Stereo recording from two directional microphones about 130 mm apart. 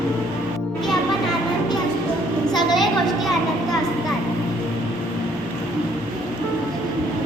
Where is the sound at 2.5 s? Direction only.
30° left (ahead or behind).